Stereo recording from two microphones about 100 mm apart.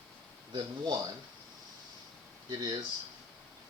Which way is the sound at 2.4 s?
45° right (ahead or behind).